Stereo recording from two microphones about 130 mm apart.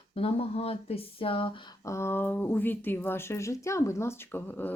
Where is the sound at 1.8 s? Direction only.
20° left (ahead or behind).